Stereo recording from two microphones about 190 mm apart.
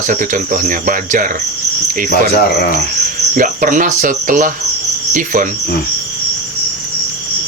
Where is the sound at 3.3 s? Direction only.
45° right (ahead or behind).